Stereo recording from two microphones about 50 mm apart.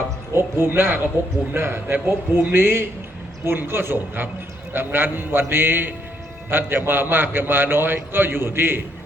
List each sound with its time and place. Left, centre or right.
0.3 s a man's voice: right